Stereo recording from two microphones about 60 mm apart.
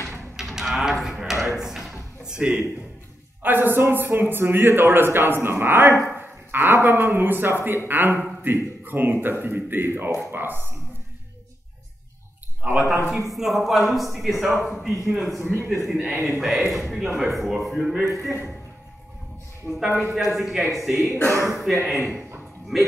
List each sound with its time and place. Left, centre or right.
0.4 s livestock: centre
1.6 s a sound: centre
2.3 s speech: centre
3.4 s a man's voice: right
12.6 s a man's voice: centre
13.3 s a man's voice: centre
19.6 s a man's voice: centre